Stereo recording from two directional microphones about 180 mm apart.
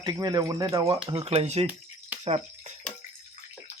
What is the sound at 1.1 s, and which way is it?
Speech, 30° right (ahead or behind).